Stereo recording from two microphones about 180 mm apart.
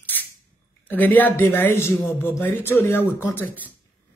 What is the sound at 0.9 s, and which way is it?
Speech, 10° left (ahead or behind).